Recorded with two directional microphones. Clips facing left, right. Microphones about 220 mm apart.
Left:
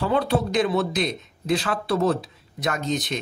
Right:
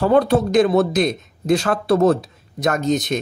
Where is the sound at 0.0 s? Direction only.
45° right (ahead or behind).